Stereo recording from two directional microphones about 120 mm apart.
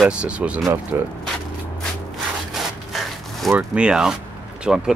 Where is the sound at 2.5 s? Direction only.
Centre (ahead or behind).